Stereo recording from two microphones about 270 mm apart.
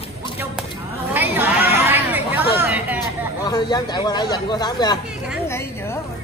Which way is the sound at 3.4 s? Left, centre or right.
Centre.